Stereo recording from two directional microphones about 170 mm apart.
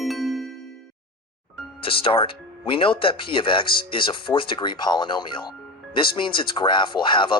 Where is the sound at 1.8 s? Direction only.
30° left (ahead or behind).